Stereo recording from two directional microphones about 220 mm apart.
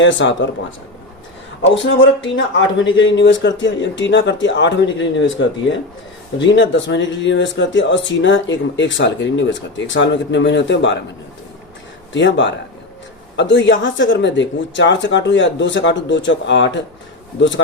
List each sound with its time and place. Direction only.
0.0 s speech: 55° left (ahead or behind)
1.6 s speech: 60° left (ahead or behind)
12.1 s speech: 55° left (ahead or behind)